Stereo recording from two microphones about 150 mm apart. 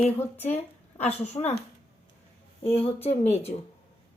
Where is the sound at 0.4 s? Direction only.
45° left (ahead or behind).